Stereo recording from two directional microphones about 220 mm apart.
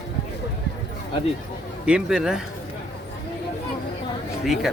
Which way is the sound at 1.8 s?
5° right (ahead or behind).